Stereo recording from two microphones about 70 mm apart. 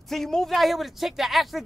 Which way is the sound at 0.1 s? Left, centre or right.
Centre.